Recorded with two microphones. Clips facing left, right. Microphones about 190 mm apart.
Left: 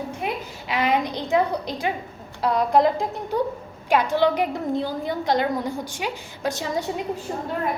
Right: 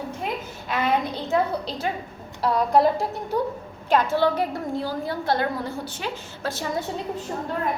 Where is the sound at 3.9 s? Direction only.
15° left (ahead or behind).